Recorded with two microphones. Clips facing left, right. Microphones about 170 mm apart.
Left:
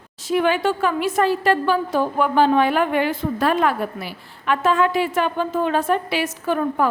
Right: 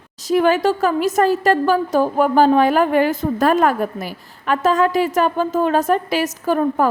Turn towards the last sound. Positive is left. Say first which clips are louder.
# right 3 dB
turn(degrees=-40)  # may be behind; listen again after turning